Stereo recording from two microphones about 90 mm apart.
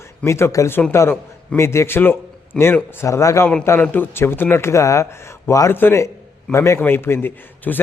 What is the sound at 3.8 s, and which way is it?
A man's voice, 20° left (ahead or behind).